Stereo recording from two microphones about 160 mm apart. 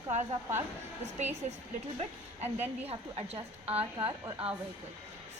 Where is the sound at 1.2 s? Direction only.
45° right (ahead or behind).